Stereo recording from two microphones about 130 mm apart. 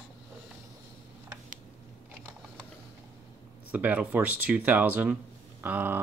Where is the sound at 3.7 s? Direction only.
10° right (ahead or behind).